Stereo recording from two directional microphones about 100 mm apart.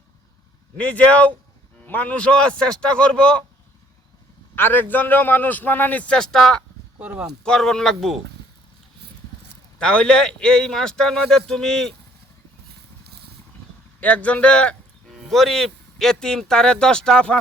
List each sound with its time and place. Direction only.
0.8 s a man's voice: 15° left (ahead or behind)
4.5 s a man's voice: 20° left (ahead or behind); by 6.6 s 5° left (ahead or behind)
7.0 s speech: 10° right (ahead or behind)
7.4 s speech: 5° left (ahead or behind)
9.7 s a man's voice: 10° left (ahead or behind)
14.0 s speech: 15° left (ahead or behind)
15.1 s speech: centre (ahead or behind)